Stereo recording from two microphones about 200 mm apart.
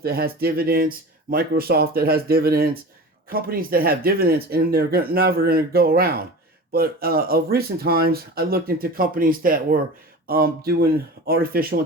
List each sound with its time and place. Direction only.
0.0 s speech: 50° right (ahead or behind)